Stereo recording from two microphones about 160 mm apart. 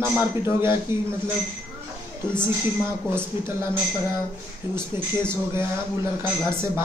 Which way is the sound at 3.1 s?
15° right (ahead or behind).